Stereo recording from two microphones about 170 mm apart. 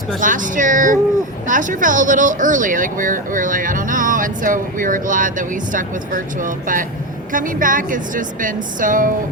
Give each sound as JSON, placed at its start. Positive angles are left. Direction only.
{"t": 0.2, "sound": "speech", "side_deg": -50}